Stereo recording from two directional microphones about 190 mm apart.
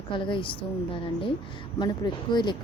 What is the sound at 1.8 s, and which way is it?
Speech, 25° left (ahead or behind).